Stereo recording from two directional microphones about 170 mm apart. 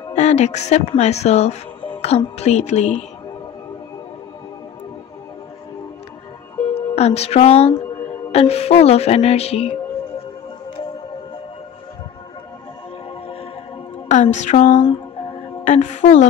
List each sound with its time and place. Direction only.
0.1 s speech: 40° left (ahead or behind)
6.7 s speech: 40° left (ahead or behind)
14.0 s a woman's voice: 45° left (ahead or behind)